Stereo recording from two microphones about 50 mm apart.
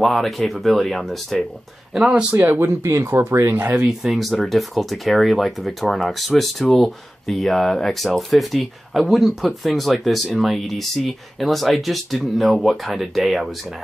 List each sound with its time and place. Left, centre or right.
0.0 s speech: centre
2.0 s speech: centre
2.6 s speech: right
3.7 s speech: centre
4.1 s speech: centre